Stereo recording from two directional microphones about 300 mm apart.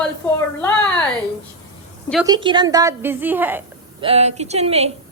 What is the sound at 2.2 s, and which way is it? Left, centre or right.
A woman's voice, centre.